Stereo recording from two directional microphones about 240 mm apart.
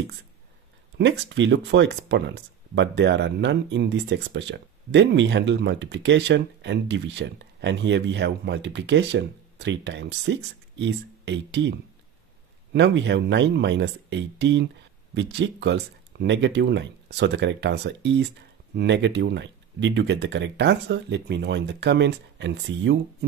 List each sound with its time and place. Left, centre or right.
0.9 s speech: right
12.7 s speech: right